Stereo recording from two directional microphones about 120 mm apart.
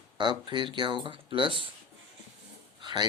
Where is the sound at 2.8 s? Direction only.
35° right (ahead or behind).